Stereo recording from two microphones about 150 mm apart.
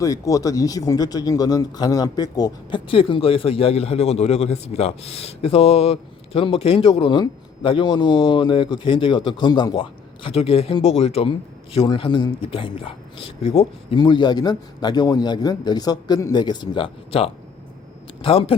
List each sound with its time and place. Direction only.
0.0 s speech: 20° left (ahead or behind); by 14.0 s 40° left (ahead or behind)
14.0 s a man's voice: 30° left (ahead or behind)